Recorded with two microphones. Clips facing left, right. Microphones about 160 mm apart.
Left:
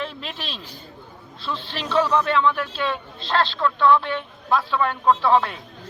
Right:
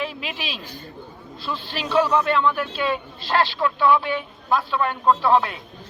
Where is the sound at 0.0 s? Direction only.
5° right (ahead or behind).